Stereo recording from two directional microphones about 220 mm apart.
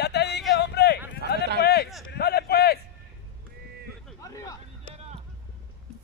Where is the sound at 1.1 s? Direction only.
50° left (ahead or behind).